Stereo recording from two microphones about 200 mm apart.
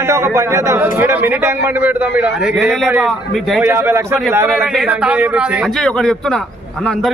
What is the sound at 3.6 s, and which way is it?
A man's voice, 10° right (ahead or behind).